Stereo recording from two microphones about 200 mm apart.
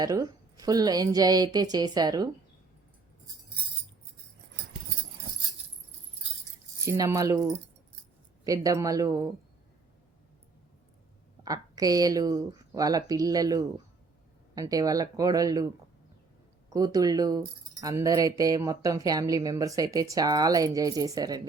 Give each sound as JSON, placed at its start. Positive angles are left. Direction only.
{"t": 0.0, "sound": "a woman's voice", "side_deg": -20}
{"t": 6.8, "sound": "speech", "side_deg": -15}
{"t": 11.4, "sound": "speech", "side_deg": -20}